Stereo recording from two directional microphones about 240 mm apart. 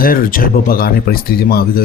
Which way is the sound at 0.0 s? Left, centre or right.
Left.